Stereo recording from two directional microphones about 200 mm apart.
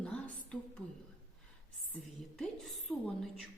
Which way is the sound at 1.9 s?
Centre (ahead or behind).